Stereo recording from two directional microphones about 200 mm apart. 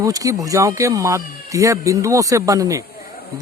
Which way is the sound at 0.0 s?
15° right (ahead or behind).